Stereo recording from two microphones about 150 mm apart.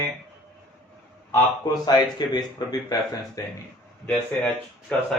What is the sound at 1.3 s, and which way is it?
Speech, 30° left (ahead or behind).